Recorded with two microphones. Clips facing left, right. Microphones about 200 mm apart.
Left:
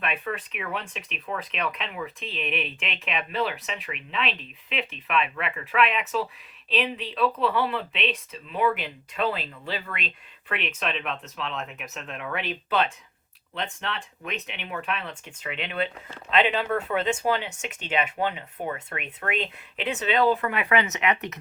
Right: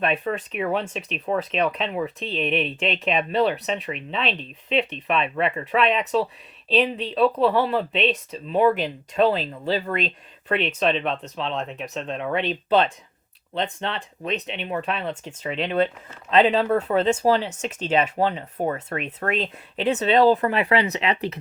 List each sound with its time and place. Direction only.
0.0 s speech: 40° right (ahead or behind)